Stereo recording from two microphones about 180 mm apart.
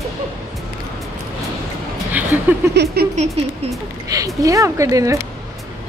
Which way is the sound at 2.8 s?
65° right (ahead or behind).